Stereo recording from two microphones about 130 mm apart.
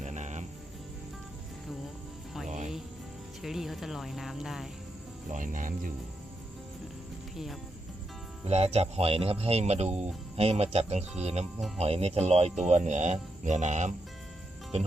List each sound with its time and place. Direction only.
0.0 s cricket: 65° right (ahead or behind)
2.5 s cricket: 65° right (ahead or behind)
3.4 s speech: centre (ahead or behind)
5.3 s speech: 90° right
8.4 s speech: 55° right (ahead or behind)